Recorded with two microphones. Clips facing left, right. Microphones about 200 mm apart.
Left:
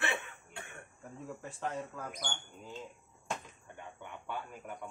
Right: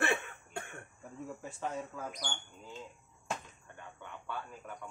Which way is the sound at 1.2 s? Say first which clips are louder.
Even; centre (ahead or behind).